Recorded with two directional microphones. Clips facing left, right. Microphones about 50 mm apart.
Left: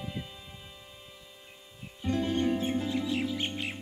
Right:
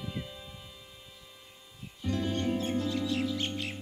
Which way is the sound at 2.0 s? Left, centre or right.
Left.